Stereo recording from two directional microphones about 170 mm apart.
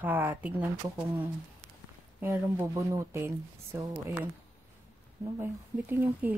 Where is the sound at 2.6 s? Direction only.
15° right (ahead or behind).